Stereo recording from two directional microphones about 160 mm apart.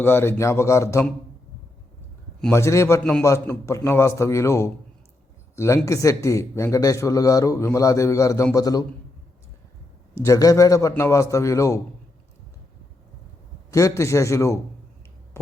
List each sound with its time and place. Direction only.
0.0 s speech: 15° left (ahead or behind)
2.5 s a man's voice: 15° left (ahead or behind)
10.2 s a man's voice: 20° left (ahead or behind)
13.7 s a man's voice: 20° left (ahead or behind)